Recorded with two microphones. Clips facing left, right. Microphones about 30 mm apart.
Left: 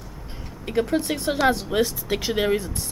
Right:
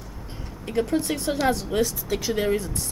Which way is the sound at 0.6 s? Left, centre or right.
Centre.